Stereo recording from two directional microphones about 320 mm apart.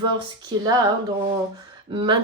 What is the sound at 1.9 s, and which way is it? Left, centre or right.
Speech, centre.